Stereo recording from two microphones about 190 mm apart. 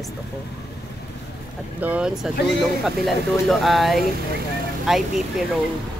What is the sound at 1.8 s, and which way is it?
Speech, 5° right (ahead or behind).